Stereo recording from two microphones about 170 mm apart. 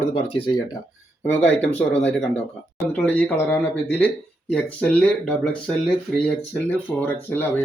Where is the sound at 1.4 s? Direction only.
90° left.